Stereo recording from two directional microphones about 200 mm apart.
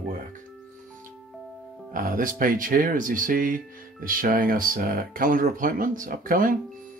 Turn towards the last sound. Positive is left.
turn(degrees=-45)  # may be behind; listen again after turning